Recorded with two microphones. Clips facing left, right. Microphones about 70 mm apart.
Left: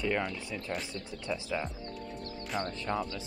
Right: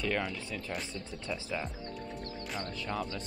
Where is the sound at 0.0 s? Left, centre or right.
Centre.